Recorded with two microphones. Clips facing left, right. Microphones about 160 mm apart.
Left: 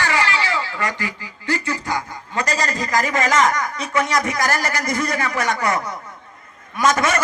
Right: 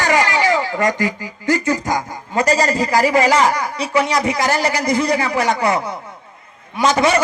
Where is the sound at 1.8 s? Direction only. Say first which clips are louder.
Right 4 dB; 35° right (ahead or behind).